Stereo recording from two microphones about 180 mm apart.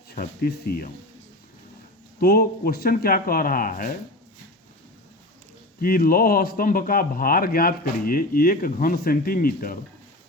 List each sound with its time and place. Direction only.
0.1 s speech: 60° left (ahead or behind)
2.1 s speech: 55° left (ahead or behind)
5.8 s speech: 55° left (ahead or behind)